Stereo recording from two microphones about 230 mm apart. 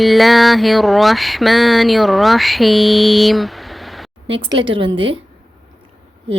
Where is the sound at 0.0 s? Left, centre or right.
Centre.